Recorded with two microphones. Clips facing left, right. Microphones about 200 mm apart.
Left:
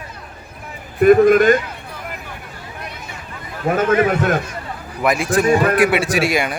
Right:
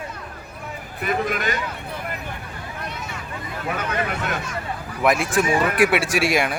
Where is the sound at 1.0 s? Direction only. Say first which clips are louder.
Left 14 dB; 50° left (ahead or behind).